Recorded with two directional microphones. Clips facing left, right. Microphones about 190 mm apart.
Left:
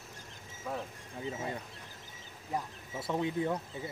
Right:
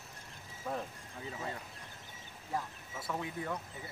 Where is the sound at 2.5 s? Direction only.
25° left (ahead or behind).